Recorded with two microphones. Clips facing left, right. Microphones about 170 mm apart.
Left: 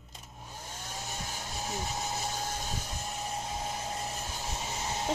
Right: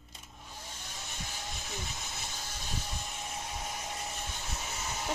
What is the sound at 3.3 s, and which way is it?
Vehicle, 30° left (ahead or behind).